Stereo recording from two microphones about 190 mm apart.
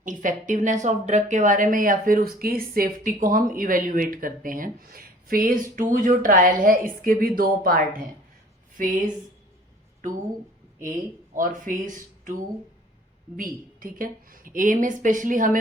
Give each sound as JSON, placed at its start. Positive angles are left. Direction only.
{"t": 0.0, "sound": "speech", "side_deg": -45}
{"t": 11.3, "sound": "speech", "side_deg": -45}